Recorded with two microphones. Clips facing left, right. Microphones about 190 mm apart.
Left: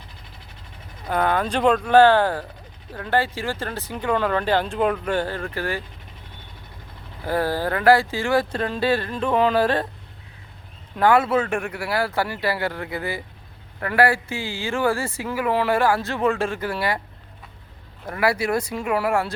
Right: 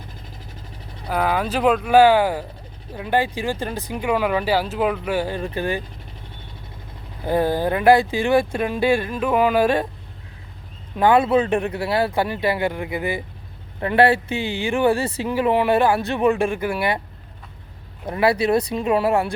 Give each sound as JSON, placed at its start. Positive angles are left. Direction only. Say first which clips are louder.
{"t": 1.0, "sound": "speech", "louder": "even", "side_deg": -5}
{"t": 7.3, "sound": "speech", "louder": "right 3 dB", "side_deg": -20}
{"t": 10.9, "sound": "speech", "louder": "right 2 dB", "side_deg": -20}
{"t": 18.0, "sound": "speech", "louder": "right 4 dB", "side_deg": -20}